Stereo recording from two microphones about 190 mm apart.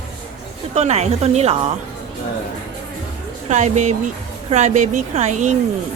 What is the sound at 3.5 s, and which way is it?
A woman's voice, 40° right (ahead or behind).